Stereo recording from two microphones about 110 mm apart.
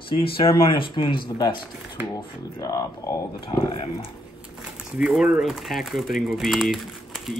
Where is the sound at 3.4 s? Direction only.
55° left (ahead or behind).